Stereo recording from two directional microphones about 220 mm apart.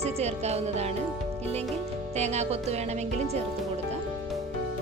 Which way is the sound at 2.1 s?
30° right (ahead or behind).